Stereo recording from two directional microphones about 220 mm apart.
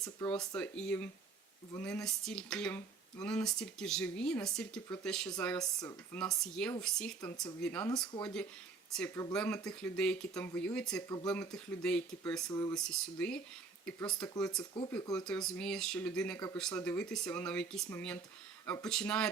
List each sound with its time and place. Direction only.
0.0 s speech: 15° left (ahead or behind)
0.3 s speech: 5° left (ahead or behind)
12.5 s speech: 15° left (ahead or behind)
12.7 s speech: 5° left (ahead or behind)